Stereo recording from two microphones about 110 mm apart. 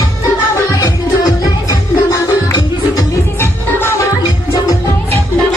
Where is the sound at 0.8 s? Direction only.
30° left (ahead or behind).